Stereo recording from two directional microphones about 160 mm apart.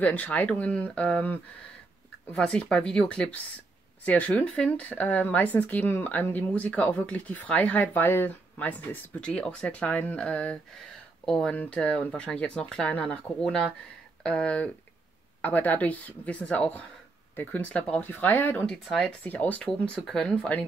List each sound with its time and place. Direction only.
0.0 s speech: 10° left (ahead or behind)